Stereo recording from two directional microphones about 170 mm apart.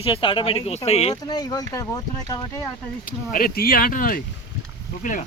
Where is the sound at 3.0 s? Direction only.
55° left (ahead or behind).